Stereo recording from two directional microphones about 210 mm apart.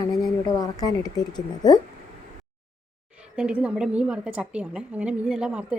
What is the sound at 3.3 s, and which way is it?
A woman's voice, 5° right (ahead or behind).